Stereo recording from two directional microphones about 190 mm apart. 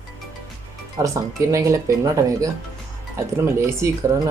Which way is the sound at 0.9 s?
15° right (ahead or behind).